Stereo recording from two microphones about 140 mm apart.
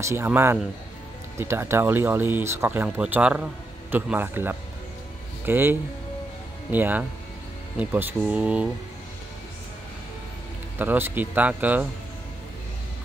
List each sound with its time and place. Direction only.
0.0 s speech: 15° right (ahead or behind)
10.8 s speech: 15° right (ahead or behind)